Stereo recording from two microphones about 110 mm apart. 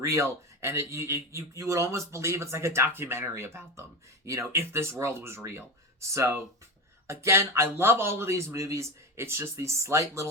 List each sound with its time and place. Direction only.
0.0 s a man's voice: 25° right (ahead or behind)